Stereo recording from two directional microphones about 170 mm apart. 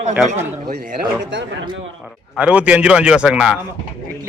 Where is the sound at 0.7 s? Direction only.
65° right (ahead or behind); by 1.5 s 90° right.